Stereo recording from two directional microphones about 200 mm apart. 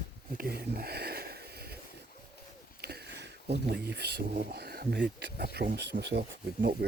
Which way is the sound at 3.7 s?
55° right (ahead or behind).